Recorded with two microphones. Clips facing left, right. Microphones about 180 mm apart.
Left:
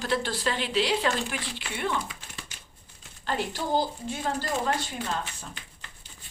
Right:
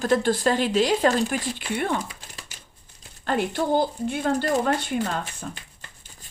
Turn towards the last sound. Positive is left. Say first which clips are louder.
# right 5 dB
turn(degrees=-45)  # may be behind; listen again after turning